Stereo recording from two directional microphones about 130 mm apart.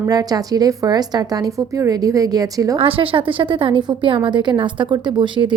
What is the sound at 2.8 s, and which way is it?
A woman's voice, 45° right (ahead or behind).